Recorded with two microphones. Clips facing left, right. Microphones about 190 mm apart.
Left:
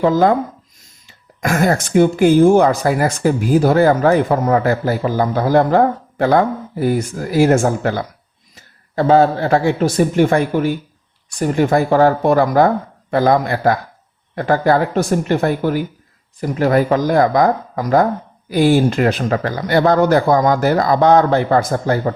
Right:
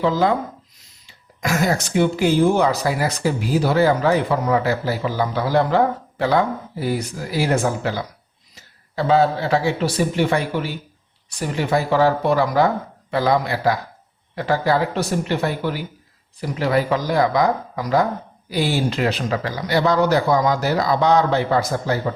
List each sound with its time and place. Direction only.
0.0 s speech: 50° left (ahead or behind)